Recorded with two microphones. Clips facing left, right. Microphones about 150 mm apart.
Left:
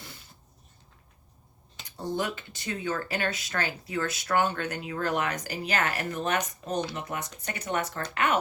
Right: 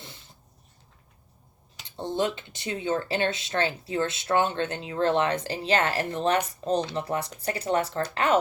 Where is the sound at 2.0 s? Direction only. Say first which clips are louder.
Right 3 dB; 25° right (ahead or behind).